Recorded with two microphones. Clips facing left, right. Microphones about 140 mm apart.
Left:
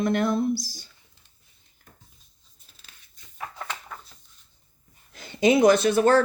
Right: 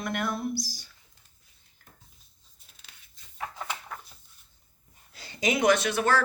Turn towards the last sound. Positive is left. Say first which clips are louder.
# left 6 dB
turn(degrees=35)  # may be behind; listen again after turning